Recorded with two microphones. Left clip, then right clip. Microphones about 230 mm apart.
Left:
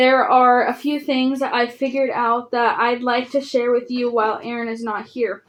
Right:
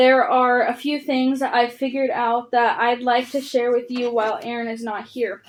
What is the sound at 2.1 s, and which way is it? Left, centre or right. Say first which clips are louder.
Speech: left 1 dB; left.